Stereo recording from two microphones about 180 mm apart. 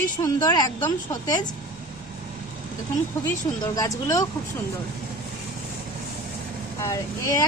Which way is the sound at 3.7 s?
20° left (ahead or behind).